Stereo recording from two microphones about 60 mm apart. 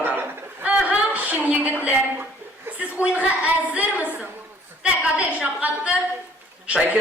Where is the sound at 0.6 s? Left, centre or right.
Right.